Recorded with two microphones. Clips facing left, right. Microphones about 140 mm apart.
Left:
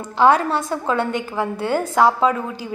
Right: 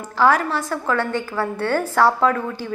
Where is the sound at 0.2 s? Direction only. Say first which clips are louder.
Left 2 dB; 25° left (ahead or behind).